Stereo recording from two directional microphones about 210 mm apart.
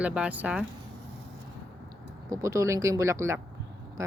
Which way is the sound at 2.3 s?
15° right (ahead or behind).